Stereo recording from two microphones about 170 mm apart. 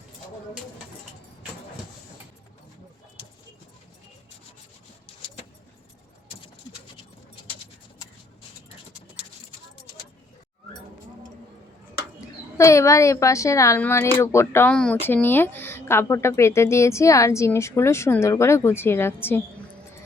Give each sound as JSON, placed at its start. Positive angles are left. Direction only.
{"t": 12.5, "sound": "speech", "side_deg": 15}